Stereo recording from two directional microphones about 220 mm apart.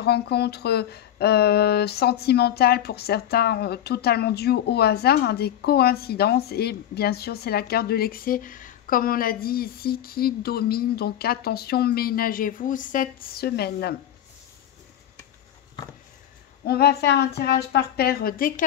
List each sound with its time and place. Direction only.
0.0 s speech: 45° left (ahead or behind)
16.6 s speech: 45° left (ahead or behind)